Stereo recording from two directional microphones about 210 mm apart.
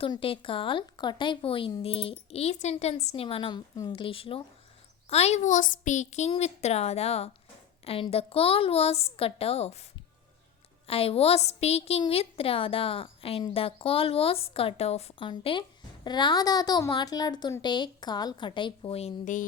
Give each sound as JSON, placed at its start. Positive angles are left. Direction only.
{"t": 0.0, "sound": "a woman's voice", "side_deg": 25}
{"t": 10.8, "sound": "a woman's voice", "side_deg": 25}